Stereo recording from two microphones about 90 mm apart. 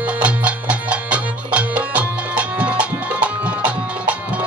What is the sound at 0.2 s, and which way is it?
Music, 15° right (ahead or behind).